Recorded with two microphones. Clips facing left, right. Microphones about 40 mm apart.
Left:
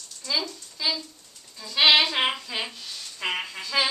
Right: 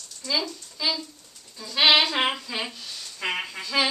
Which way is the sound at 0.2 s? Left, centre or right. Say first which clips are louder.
Right 1 dB; centre.